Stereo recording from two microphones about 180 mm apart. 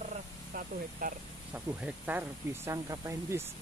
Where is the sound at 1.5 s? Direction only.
5° right (ahead or behind).